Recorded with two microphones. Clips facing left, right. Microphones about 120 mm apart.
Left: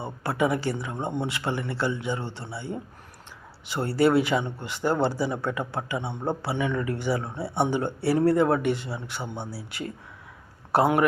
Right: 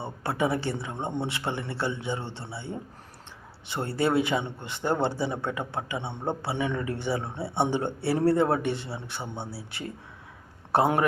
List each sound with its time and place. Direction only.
0.0 s a man's voice: 25° right (ahead or behind)